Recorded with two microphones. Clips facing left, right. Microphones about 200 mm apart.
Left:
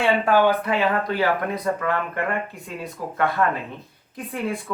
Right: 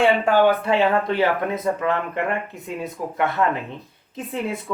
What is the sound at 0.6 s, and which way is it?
Speech, 30° right (ahead or behind).